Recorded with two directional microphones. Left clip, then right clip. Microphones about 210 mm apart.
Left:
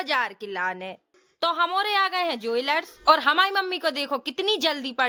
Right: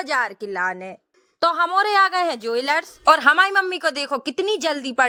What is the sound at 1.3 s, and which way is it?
Speech, 30° right (ahead or behind).